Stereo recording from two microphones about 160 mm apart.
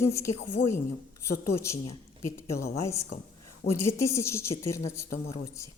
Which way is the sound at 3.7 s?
15° left (ahead or behind).